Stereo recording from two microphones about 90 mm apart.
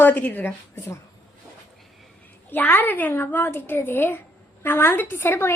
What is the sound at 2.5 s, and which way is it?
A woman's voice, 20° left (ahead or behind).